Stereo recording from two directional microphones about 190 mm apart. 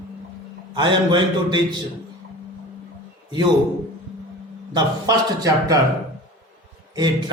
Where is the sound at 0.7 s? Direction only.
25° right (ahead or behind).